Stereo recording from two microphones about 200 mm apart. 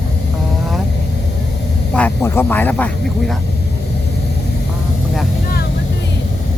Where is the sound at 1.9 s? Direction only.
10° left (ahead or behind).